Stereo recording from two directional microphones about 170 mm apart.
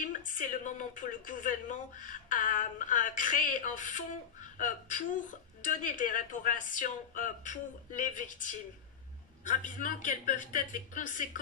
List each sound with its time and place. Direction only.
0.0 s a woman's voice: 50° left (ahead or behind)